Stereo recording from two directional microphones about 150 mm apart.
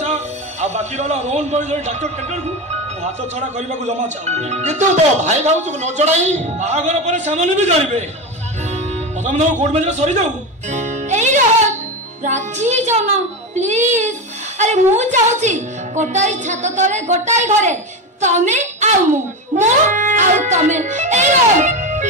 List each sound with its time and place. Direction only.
0.0 s speech: 50° right (ahead or behind)
8.7 s music: 50° right (ahead or behind)
13.6 s a child's voice: 50° right (ahead or behind)